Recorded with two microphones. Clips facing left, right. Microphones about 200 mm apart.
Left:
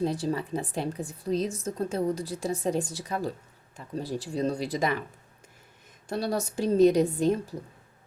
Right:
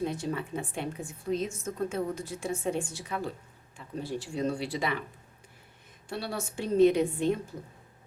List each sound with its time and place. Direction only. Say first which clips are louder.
0.0 s a woman's voice: left 4 dB; 35° left (ahead or behind)
6.1 s a woman's voice: left 6 dB; 40° left (ahead or behind)